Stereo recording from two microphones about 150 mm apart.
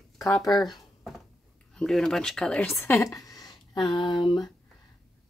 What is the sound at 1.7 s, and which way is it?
Speech, 5° left (ahead or behind).